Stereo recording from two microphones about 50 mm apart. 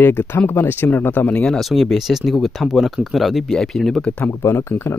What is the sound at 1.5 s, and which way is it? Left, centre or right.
Speech, centre.